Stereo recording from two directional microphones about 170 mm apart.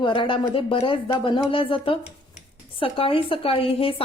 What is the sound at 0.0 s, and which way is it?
A woman's voice, 30° left (ahead or behind).